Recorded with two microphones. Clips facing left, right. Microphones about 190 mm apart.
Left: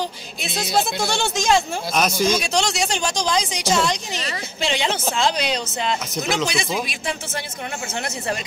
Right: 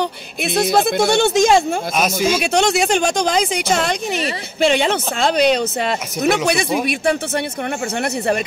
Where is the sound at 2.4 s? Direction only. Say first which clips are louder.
Right 6 dB; 55° right (ahead or behind).